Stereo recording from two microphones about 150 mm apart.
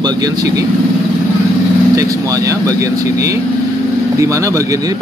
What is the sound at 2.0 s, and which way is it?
A man's voice, 20° right (ahead or behind).